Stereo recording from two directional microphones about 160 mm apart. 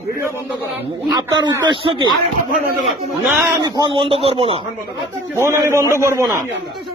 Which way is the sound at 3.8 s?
30° right (ahead or behind).